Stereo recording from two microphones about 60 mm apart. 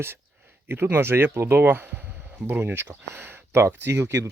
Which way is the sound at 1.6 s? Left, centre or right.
Right.